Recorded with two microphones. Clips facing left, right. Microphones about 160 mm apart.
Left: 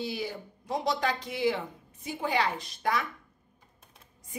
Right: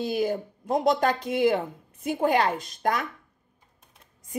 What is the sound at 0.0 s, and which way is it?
A woman's voice, 50° right (ahead or behind).